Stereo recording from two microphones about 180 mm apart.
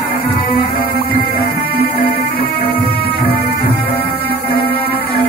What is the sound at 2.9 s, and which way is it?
Music, 60° left (ahead or behind).